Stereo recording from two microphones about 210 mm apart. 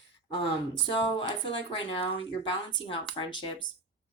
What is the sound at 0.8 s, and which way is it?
A woman's voice, 25° left (ahead or behind).